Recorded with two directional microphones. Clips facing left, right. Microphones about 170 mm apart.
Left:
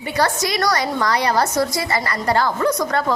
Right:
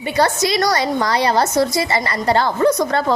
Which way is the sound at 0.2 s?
25° right (ahead or behind).